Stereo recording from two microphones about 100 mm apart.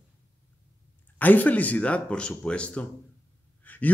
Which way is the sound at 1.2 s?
15° left (ahead or behind).